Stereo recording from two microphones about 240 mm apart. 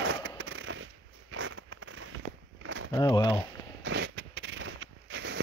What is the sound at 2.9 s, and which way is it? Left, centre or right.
Speech, centre.